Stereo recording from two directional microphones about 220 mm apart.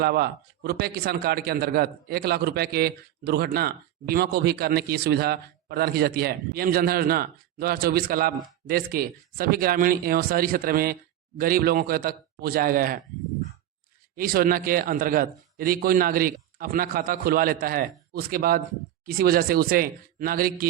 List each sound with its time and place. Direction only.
0.0 s a man's voice: 45° right (ahead or behind)
14.2 s a man's voice: 40° right (ahead or behind)